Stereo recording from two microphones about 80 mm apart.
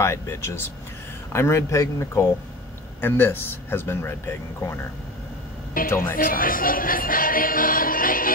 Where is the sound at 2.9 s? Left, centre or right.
Left.